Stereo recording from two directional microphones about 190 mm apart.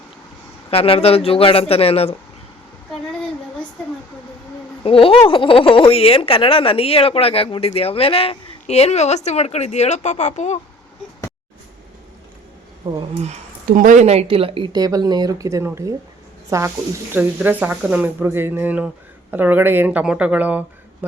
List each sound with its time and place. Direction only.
0.7 s speech: 30° left (ahead or behind)
4.8 s a woman's voice: 30° left (ahead or behind)
13.0 s speech: 35° right (ahead or behind); by 20.7 s 10° right (ahead or behind)